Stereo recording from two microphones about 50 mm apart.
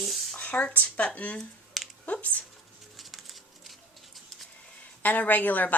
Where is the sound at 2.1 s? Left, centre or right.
Left.